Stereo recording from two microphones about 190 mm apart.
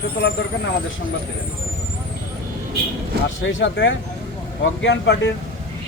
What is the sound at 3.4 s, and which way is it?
Speech, 75° left (ahead or behind).